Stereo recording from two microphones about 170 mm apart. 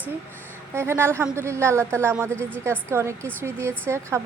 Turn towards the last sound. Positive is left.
turn(degrees=-15)  # may be behind; listen again after turning